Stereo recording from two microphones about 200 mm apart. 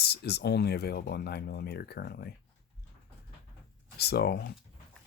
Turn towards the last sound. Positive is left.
turn(degrees=50)  # may be behind; listen again after turning